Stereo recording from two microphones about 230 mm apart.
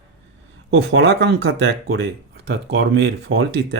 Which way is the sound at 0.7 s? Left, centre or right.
Right.